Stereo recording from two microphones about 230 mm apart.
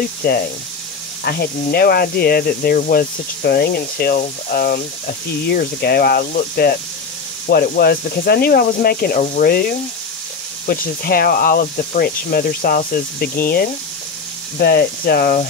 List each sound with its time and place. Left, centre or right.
0.2 s speech: left